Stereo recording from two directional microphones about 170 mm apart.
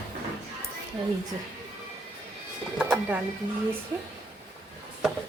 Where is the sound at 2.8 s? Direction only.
10° right (ahead or behind).